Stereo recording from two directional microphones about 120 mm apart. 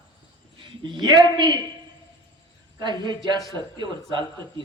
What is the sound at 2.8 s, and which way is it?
A man's voice, 40° right (ahead or behind).